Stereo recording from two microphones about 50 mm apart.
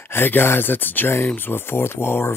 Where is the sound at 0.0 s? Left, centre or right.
Left.